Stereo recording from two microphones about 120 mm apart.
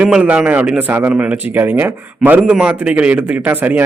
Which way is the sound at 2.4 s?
5° right (ahead or behind).